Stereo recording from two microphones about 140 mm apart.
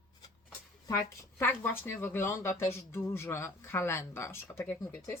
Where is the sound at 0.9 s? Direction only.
20° left (ahead or behind).